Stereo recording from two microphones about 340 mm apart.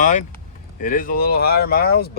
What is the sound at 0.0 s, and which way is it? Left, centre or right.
Vehicle, left.